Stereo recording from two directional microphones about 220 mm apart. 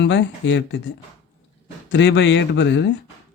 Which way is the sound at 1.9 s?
55° left (ahead or behind).